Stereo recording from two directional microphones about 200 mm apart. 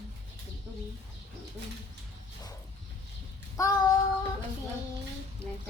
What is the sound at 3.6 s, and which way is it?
Child singing, 15° left (ahead or behind).